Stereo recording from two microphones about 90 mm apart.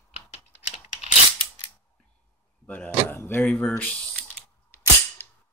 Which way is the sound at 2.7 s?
20° left (ahead or behind).